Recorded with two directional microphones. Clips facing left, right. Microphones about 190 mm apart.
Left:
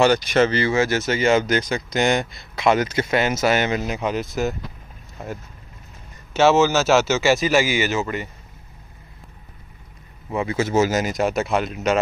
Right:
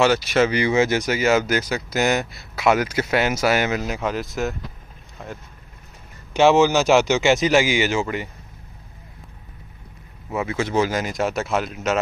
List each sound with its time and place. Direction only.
0.0 s speech: centre (ahead or behind)
3.8 s speech: 20° left (ahead or behind)
4.2 s speech: centre (ahead or behind)
6.3 s speech: 15° right (ahead or behind)
10.3 s speech: centre (ahead or behind)